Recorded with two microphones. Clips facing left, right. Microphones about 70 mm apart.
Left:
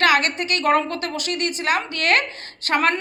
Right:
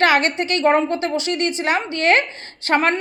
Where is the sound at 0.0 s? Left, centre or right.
Right.